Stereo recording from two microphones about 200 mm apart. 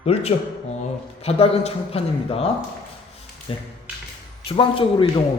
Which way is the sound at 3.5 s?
25° left (ahead or behind).